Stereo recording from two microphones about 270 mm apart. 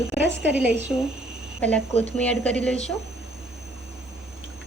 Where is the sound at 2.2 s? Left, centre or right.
Centre.